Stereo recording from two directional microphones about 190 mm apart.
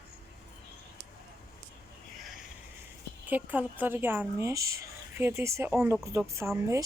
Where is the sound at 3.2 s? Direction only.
10° right (ahead or behind).